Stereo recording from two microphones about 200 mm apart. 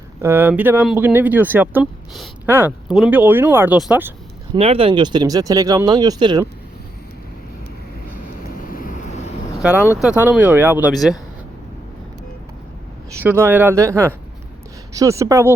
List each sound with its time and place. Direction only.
0.2 s speech: 10° right (ahead or behind)
4.5 s speech: 30° right (ahead or behind)
8.1 s vehicle: 45° left (ahead or behind)
9.6 s speech: 5° right (ahead or behind)
13.1 s speech: 10° right (ahead or behind)